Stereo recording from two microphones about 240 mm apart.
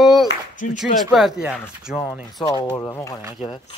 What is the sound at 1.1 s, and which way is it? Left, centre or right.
Speech, centre.